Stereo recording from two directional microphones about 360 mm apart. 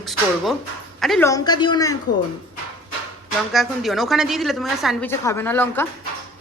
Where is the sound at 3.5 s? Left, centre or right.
Centre.